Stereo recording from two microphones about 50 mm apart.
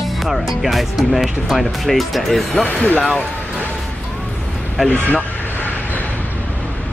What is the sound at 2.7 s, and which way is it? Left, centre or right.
Speech, left.